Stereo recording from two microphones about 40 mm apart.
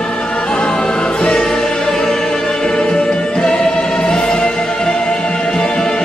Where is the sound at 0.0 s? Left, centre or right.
Left.